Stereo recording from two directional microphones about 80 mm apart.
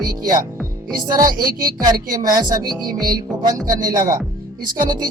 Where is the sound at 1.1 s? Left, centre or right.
Right.